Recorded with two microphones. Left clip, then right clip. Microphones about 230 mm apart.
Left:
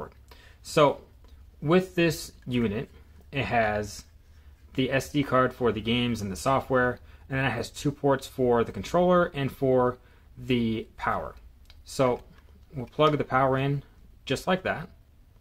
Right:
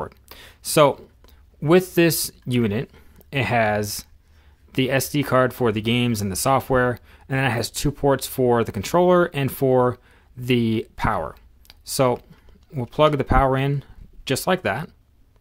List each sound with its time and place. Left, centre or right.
0.0 s speech: right